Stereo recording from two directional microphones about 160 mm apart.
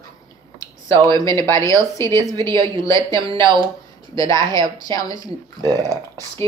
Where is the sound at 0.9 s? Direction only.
25° right (ahead or behind).